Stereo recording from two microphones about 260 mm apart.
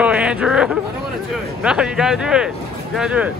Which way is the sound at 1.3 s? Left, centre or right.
Centre.